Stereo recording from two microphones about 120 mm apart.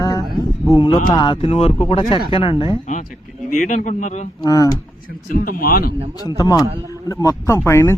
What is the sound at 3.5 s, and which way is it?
Speech, 90° left.